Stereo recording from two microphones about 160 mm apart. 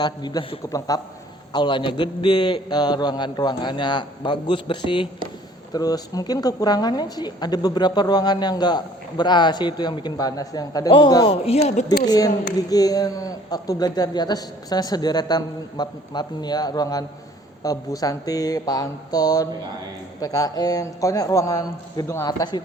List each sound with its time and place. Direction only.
0.0 s a woman's voice: 25° left (ahead or behind)
11.4 s speech: 40° left (ahead or behind)
12.0 s a woman's voice: 25° left (ahead or behind)